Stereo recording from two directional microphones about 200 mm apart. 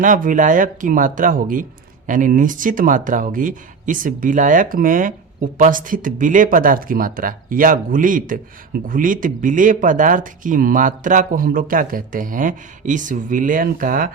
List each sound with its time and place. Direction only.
0.0 s speech: 40° right (ahead or behind)